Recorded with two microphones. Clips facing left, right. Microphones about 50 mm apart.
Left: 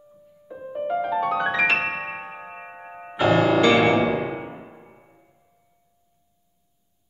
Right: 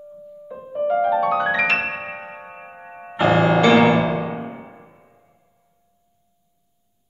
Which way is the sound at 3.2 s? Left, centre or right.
Centre.